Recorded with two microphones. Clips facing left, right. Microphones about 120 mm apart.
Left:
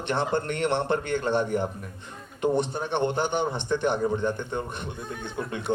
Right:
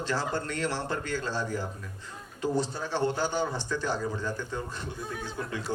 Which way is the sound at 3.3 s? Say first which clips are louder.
Left 3 dB; 65° left (ahead or behind).